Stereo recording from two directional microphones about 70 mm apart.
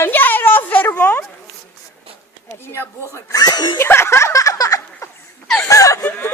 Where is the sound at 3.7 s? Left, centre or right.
Left.